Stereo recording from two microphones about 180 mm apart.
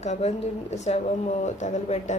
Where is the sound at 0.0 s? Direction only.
40° left (ahead or behind).